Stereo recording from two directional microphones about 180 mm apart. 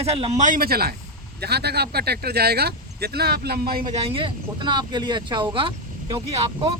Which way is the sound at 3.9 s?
30° right (ahead or behind).